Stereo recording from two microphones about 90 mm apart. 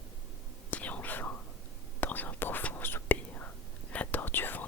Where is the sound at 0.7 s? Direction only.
15° left (ahead or behind).